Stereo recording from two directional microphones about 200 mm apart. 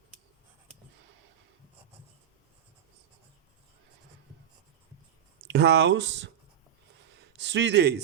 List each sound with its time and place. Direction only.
5.5 s speech: 60° right (ahead or behind)
7.3 s a man's voice: 60° right (ahead or behind)